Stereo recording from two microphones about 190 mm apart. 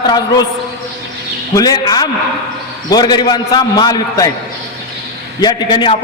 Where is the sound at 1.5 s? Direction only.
20° left (ahead or behind).